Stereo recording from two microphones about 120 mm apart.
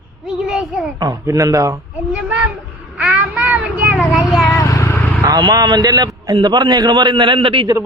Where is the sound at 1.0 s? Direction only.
30° right (ahead or behind).